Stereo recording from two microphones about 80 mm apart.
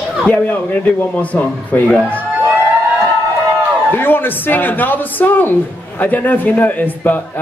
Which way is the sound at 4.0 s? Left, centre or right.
Left.